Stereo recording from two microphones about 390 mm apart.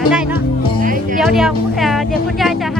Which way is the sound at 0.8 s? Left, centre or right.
Right.